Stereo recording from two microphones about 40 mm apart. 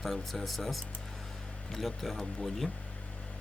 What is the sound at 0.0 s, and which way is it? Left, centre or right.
Speech, centre.